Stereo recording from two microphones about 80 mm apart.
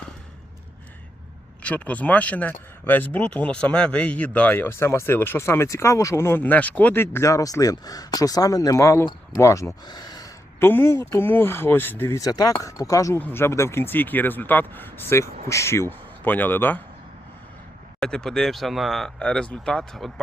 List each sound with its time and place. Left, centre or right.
1.6 s speech: centre; by 6.4 s left
6.4 s speech: centre; by 9.7 s left
9.8 s a sound: left
10.6 s speech: left
12.1 s speech: left
13.1 s speech: left
18.0 s speech: centre
19.2 s speech: centre